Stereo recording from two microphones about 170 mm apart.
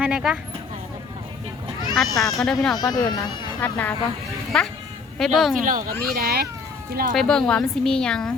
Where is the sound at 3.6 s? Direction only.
10° left (ahead or behind).